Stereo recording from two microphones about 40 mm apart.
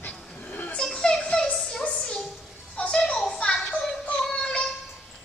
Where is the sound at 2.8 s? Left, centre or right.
Left.